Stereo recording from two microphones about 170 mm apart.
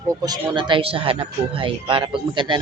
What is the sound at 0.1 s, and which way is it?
Speech, 25° right (ahead or behind).